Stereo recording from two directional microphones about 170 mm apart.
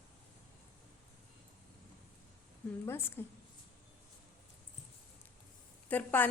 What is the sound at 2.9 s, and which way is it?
Speech, 15° left (ahead or behind).